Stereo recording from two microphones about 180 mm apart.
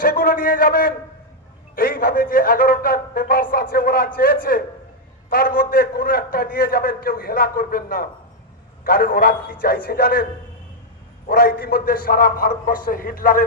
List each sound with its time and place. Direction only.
0.0 s a man's voice: 50° left (ahead or behind)
11.3 s a man's voice: 55° left (ahead or behind)